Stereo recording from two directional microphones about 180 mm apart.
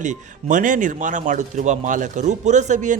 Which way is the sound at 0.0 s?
45° right (ahead or behind).